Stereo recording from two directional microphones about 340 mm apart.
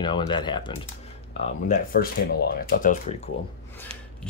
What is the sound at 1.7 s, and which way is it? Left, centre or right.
Speech, left.